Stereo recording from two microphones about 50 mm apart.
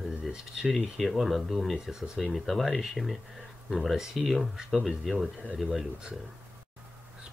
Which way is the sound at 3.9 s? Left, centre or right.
Centre.